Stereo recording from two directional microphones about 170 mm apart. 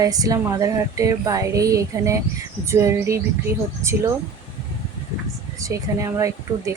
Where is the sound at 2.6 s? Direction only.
15° right (ahead or behind).